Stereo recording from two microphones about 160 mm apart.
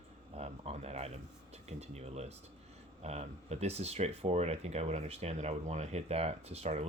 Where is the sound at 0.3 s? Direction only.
40° right (ahead or behind).